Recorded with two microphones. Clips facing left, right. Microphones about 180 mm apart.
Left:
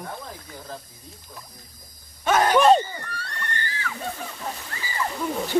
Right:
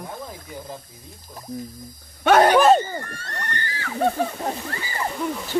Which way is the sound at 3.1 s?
45° right (ahead or behind).